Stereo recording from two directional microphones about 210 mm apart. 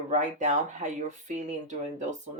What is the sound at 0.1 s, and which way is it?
Speech, 35° right (ahead or behind).